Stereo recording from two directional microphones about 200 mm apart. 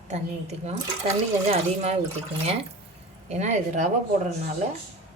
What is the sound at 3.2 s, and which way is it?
Speech, 35° right (ahead or behind).